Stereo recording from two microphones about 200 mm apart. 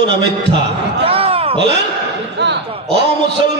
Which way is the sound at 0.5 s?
30° right (ahead or behind).